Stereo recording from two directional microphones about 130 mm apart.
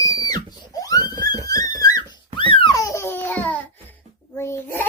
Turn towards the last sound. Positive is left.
turn(degrees=20)  # may be behind; listen again after turning